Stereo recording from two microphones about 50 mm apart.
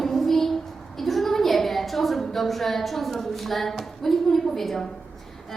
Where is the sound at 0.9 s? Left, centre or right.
Centre.